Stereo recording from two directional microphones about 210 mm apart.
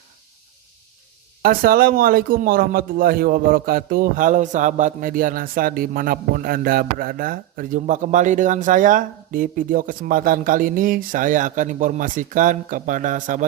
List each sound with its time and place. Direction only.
1.4 s a man's voice: 45° right (ahead or behind)